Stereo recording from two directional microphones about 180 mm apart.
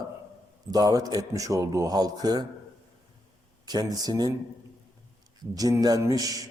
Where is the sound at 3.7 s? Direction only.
20° right (ahead or behind).